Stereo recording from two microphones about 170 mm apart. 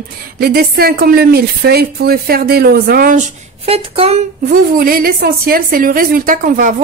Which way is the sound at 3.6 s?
35° right (ahead or behind).